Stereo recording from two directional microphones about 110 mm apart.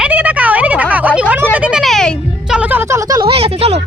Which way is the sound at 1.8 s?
5° left (ahead or behind).